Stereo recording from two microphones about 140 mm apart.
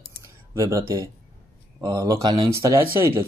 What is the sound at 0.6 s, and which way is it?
Speech, 20° right (ahead or behind).